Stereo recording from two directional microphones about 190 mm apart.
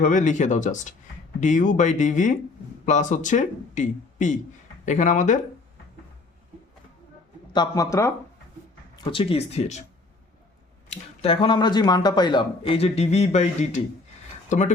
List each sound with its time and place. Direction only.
0.0 s speech: 40° left (ahead or behind)
7.5 s speech: 20° left (ahead or behind)
9.1 s speech: 30° left (ahead or behind)
10.8 s speech: 30° left (ahead or behind)